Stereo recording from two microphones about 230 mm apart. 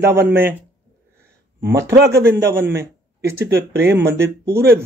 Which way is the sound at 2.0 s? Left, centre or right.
Centre.